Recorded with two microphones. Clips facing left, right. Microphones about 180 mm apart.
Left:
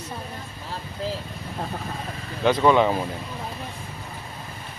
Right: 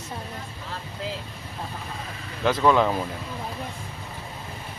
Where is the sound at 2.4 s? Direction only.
Centre (ahead or behind).